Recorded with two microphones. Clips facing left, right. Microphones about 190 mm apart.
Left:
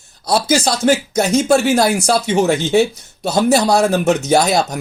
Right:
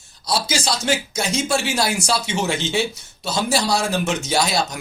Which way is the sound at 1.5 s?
45° left (ahead or behind).